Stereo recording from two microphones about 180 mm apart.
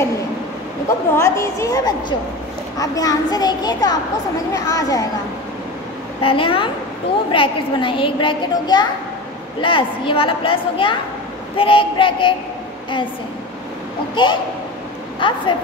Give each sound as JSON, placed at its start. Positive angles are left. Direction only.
{"t": 0.8, "sound": "a woman's voice", "side_deg": 15}
{"t": 6.2, "sound": "a child's voice", "side_deg": 30}
{"t": 14.1, "sound": "a child's voice", "side_deg": 25}